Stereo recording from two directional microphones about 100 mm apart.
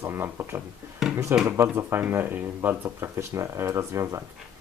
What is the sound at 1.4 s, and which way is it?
Speech, 25° right (ahead or behind).